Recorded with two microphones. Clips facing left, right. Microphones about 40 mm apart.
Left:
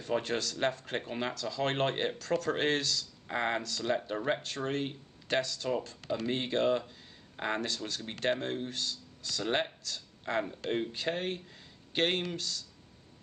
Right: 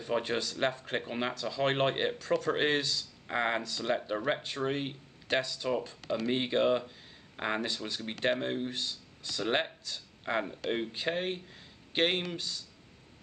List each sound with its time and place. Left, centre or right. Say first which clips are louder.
0.0 s speech: right 1 dB; centre